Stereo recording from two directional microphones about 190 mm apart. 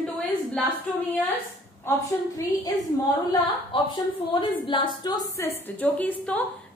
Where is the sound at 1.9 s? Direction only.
15° left (ahead or behind).